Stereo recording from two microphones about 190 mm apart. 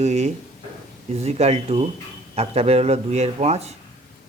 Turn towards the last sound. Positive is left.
turn(degrees=-35)  # may be behind; listen again after turning